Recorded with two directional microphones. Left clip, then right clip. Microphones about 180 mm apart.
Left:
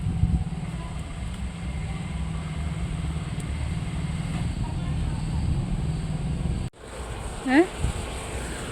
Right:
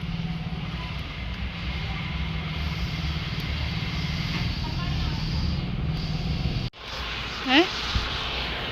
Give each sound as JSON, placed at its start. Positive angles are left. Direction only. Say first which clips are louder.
{"t": 7.4, "sound": "speech", "louder": "even", "side_deg": 40}